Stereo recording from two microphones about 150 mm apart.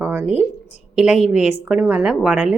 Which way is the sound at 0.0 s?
15° right (ahead or behind).